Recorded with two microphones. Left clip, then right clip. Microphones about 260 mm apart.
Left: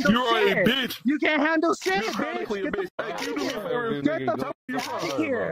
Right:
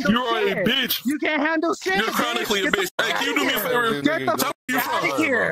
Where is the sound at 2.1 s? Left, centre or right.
Right.